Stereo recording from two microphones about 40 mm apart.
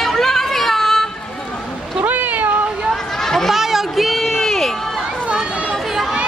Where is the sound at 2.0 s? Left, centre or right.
Right.